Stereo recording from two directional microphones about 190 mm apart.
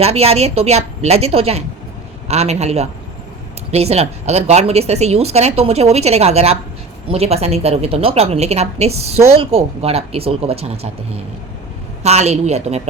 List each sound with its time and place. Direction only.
0.0 s a woman's voice: 35° right (ahead or behind)
12.0 s a woman's voice: 35° right (ahead or behind)